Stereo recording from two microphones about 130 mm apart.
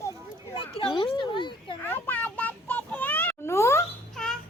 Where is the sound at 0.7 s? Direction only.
40° left (ahead or behind).